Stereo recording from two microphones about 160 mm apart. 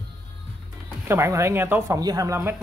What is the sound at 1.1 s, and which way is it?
Speech, 15° right (ahead or behind).